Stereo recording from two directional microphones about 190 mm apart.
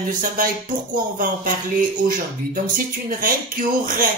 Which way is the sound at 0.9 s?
45° right (ahead or behind).